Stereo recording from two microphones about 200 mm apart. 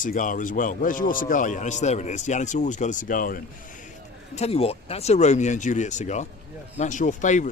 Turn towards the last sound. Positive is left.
turn(degrees=40)  # may be behind; listen again after turning